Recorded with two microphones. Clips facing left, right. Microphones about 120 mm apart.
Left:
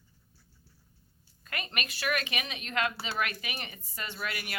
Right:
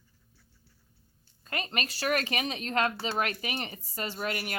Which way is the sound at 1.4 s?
30° right (ahead or behind).